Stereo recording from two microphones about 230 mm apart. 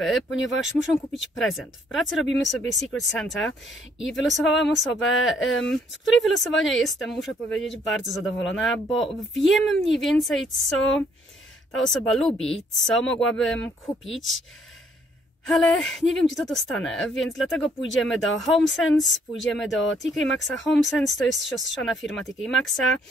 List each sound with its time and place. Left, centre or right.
0.3 s speech: left
1.3 s speech: centre
15.4 s speech: centre